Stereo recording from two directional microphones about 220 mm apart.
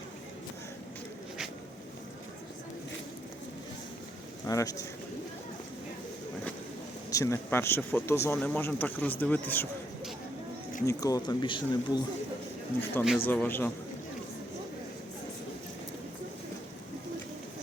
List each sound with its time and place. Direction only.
4.4 s speech: 15° left (ahead or behind)
7.1 s speech: 15° left (ahead or behind)
10.8 s speech: 15° left (ahead or behind)
13.1 s speech: 10° left (ahead or behind)